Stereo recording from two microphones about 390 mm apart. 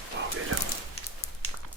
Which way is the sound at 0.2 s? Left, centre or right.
Right.